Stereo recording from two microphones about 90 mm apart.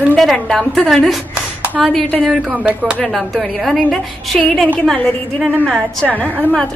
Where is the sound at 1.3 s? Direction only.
20° right (ahead or behind).